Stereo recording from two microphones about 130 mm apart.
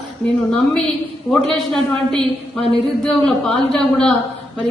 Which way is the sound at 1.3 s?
5° left (ahead or behind).